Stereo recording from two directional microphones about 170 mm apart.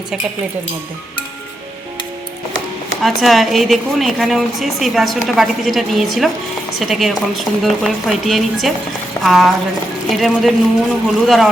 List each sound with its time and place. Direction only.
3.0 s a woman's voice: centre (ahead or behind)